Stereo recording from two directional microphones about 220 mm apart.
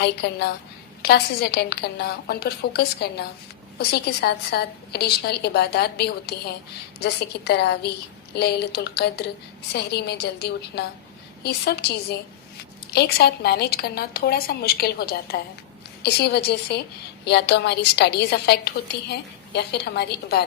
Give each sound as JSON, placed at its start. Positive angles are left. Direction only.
{"t": 0.0, "sound": "a woman's voice", "side_deg": 50}